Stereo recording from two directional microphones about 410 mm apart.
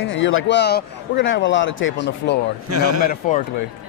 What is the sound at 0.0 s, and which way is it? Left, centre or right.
A man's voice, left.